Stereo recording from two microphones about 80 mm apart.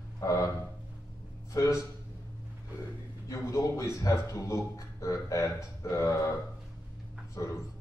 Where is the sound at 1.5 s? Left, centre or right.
Left.